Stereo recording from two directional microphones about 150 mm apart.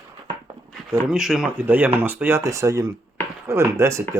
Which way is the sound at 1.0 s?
5° right (ahead or behind).